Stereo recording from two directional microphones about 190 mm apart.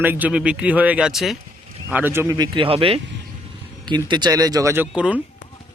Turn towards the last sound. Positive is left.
turn(degrees=-5)  # may be behind; listen again after turning